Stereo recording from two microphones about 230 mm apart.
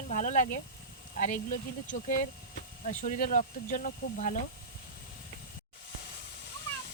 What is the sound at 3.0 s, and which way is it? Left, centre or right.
Speech, left.